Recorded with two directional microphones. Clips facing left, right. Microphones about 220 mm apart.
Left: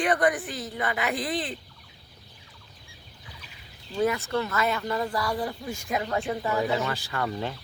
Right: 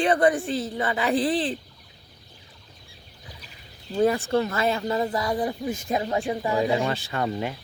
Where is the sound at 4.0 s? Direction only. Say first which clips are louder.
Right 4 dB; 30° right (ahead or behind).